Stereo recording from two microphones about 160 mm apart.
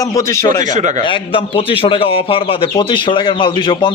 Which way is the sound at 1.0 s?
30° left (ahead or behind).